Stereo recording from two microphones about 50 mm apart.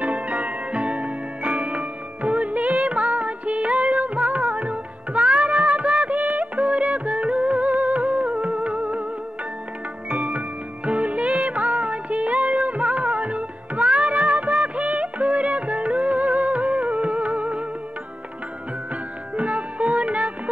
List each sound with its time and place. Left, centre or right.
0.0 s music: right
10.0 s music: right
19.3 s music: right